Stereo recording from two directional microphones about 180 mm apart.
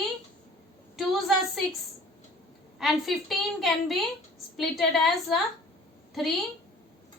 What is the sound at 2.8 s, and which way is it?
A woman's voice, centre (ahead or behind).